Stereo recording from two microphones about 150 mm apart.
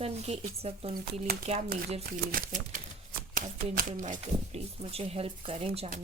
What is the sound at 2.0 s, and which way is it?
Speech, 75° right (ahead or behind).